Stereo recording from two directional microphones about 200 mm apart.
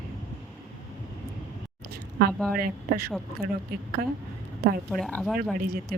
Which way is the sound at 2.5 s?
45° right (ahead or behind).